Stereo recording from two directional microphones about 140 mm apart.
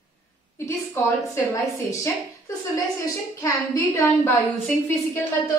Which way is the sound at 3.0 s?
25° left (ahead or behind).